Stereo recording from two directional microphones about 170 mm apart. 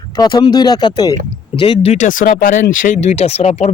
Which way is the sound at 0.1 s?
25° left (ahead or behind).